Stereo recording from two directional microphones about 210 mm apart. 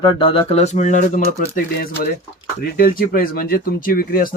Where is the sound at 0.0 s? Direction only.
25° left (ahead or behind).